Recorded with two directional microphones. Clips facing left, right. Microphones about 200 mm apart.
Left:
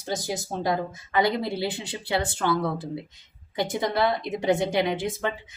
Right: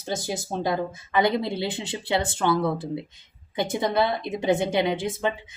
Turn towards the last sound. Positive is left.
turn(degrees=-20)  # may be behind; listen again after turning